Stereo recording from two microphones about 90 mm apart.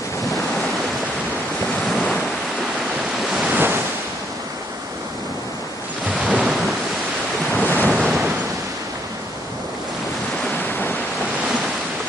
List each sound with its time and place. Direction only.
1.9 s waves: 5° left (ahead or behind)
3.5 s waves: 25° right (ahead or behind)
6.0 s waves: 15° right (ahead or behind)
7.5 s ocean: 20° left (ahead or behind)
8.0 s thunder: centre (ahead or behind)
10.7 s waves: 20° left (ahead or behind)